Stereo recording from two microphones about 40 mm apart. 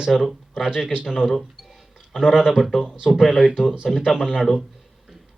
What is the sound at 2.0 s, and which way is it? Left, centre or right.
Speech, centre.